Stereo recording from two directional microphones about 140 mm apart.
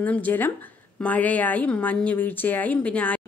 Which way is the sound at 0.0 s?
10° left (ahead or behind).